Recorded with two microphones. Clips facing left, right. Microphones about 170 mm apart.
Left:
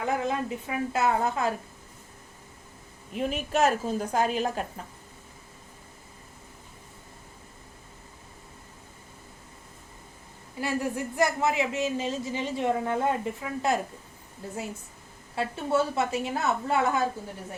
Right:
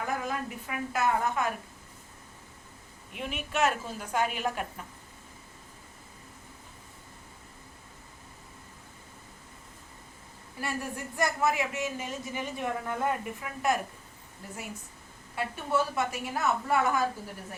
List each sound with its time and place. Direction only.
0.0 s speech: 25° left (ahead or behind)
3.1 s a woman's voice: 40° left (ahead or behind)
10.6 s speech: 20° left (ahead or behind)
15.4 s speech: 25° left (ahead or behind)